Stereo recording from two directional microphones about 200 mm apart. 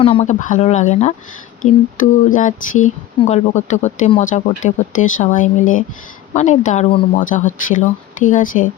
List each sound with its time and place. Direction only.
0.0 s speech: 30° left (ahead or behind)